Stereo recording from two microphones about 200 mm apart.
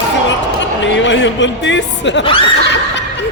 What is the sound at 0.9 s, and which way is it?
Speech, 65° left (ahead or behind).